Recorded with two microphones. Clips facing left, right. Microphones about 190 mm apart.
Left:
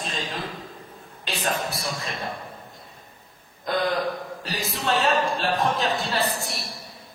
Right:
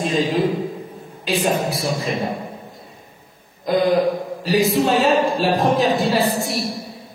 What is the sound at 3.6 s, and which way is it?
A man's voice, centre (ahead or behind).